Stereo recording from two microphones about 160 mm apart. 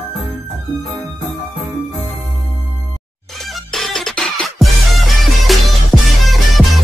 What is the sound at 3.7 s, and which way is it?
Music, centre (ahead or behind).